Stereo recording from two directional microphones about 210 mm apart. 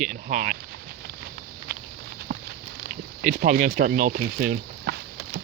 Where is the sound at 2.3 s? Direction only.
55° right (ahead or behind).